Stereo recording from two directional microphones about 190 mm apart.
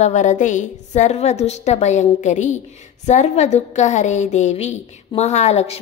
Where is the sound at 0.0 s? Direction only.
40° left (ahead or behind).